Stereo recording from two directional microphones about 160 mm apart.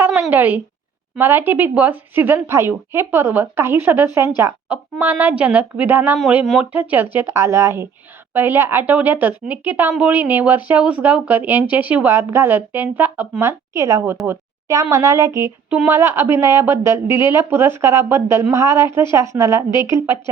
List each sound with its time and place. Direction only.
0.0 s a woman's voice: 10° right (ahead or behind)